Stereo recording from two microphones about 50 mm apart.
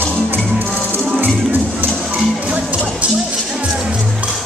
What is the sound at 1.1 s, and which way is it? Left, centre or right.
Music, right.